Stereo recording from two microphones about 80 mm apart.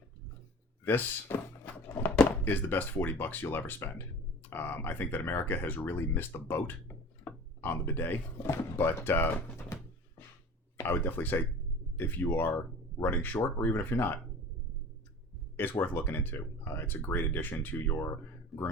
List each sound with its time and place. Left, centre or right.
0.9 s a sound: left
2.4 s speech: left
9.7 s music: left
10.8 s speech: left
15.5 s speech: left